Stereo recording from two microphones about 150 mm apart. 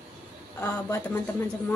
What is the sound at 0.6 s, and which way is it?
Speech, 15° left (ahead or behind).